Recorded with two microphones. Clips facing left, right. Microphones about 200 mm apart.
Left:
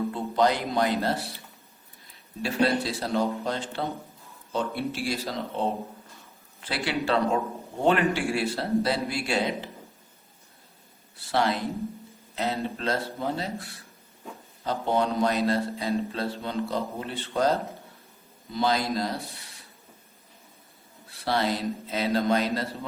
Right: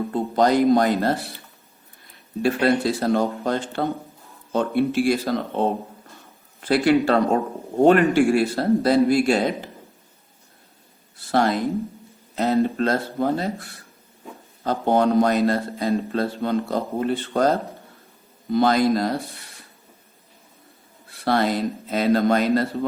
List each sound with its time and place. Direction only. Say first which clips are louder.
0.1 s speech: right 8 dB; 45° right (ahead or behind)
2.4 s a man's voice: right 5 dB; 50° right (ahead or behind)
11.3 s a man's voice: right 6 dB; 45° right (ahead or behind)
18.5 s a man's voice: right 8 dB; 55° right (ahead or behind)
21.2 s a man's voice: right 5 dB; 50° right (ahead or behind)